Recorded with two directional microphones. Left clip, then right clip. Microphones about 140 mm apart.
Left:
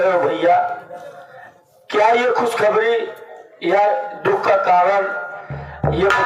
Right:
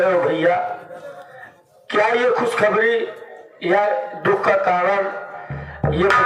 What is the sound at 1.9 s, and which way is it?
Speech, 35° right (ahead or behind).